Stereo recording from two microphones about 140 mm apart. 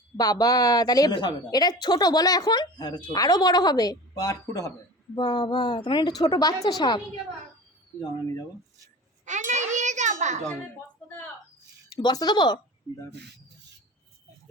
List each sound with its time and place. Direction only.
0.2 s a woman's voice: 25° left (ahead or behind)
9.2 s a child's voice: 60° right (ahead or behind)
11.9 s speech: 30° left (ahead or behind)